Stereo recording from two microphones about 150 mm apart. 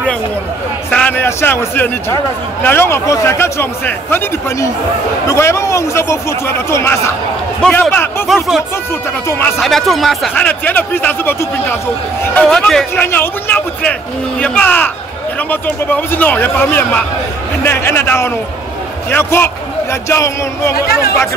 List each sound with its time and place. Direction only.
0.8 s a man's voice: 10° left (ahead or behind)
8.3 s speech: centre (ahead or behind)
9.6 s speech: centre (ahead or behind)
12.4 s speech: 5° left (ahead or behind); by 20.7 s 20° left (ahead or behind)
20.7 s speech: 90° left